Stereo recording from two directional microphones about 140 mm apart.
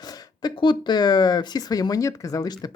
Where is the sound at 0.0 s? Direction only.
30° left (ahead or behind).